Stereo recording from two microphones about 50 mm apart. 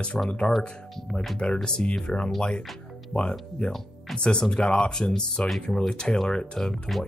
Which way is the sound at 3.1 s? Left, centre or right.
Left.